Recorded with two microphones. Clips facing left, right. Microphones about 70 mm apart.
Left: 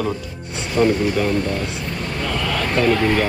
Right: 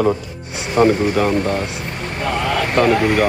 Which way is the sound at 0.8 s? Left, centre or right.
Right.